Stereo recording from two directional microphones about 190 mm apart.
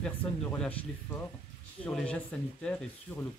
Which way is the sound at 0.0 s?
5° left (ahead or behind).